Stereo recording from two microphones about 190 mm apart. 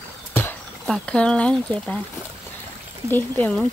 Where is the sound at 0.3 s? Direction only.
10° left (ahead or behind).